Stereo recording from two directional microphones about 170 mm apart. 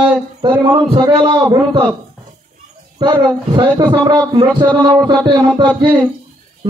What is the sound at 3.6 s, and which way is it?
A man's voice, 25° right (ahead or behind).